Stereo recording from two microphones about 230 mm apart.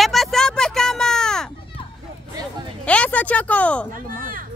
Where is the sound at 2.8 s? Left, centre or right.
Centre.